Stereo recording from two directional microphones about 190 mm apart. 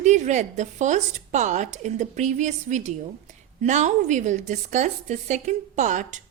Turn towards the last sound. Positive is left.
turn(degrees=-40)  # may be behind; listen again after turning